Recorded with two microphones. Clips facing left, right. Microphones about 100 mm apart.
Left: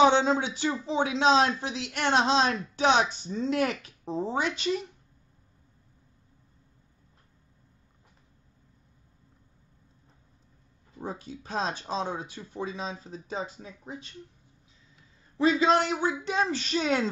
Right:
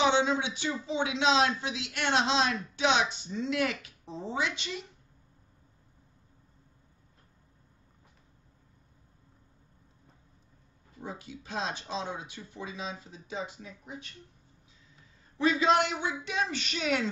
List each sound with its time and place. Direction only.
0.0 s a man's voice: 40° left (ahead or behind)
11.0 s a man's voice: 40° left (ahead or behind)
15.6 s a man's voice: 35° left (ahead or behind)